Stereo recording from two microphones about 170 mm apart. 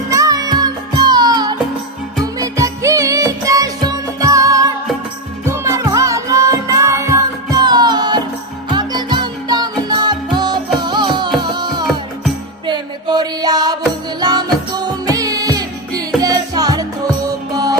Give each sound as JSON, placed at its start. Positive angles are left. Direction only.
{"t": 0.1, "sound": "music", "side_deg": -20}